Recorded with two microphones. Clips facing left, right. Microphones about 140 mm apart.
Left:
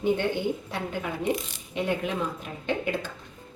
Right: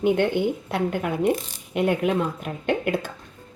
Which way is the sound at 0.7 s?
55° right (ahead or behind).